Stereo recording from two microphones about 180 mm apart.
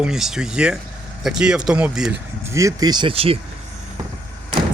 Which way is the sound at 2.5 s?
15° right (ahead or behind).